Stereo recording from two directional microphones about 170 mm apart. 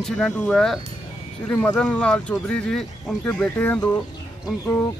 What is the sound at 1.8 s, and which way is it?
Speech, 5° left (ahead or behind).